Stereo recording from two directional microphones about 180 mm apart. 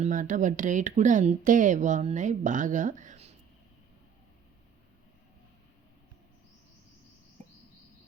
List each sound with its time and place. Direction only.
0.0 s speech: 45° right (ahead or behind)